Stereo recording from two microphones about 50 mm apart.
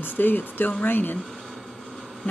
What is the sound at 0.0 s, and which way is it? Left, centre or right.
Speech, left.